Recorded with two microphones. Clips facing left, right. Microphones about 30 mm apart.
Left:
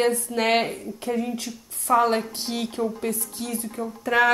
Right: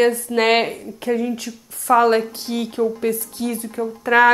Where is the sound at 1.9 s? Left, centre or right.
Right.